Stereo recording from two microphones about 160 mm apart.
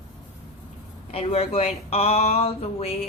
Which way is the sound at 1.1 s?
40° left (ahead or behind).